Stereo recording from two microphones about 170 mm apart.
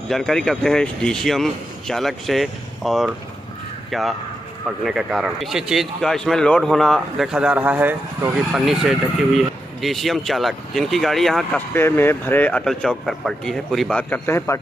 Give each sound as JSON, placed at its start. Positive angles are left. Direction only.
{"t": 0.1, "sound": "a man's voice", "side_deg": 5}
{"t": 11.7, "sound": "speech", "side_deg": 15}